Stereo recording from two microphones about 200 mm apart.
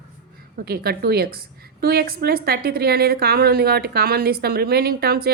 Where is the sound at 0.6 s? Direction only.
50° right (ahead or behind).